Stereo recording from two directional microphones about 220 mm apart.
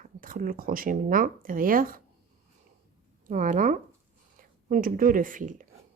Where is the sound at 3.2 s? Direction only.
35° right (ahead or behind).